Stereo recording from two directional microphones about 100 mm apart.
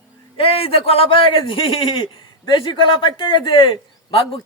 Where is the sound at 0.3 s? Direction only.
75° left (ahead or behind); by 3.7 s 55° left (ahead or behind).